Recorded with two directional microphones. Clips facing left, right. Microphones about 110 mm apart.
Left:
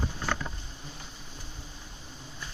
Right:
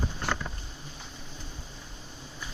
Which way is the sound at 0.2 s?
70° right (ahead or behind).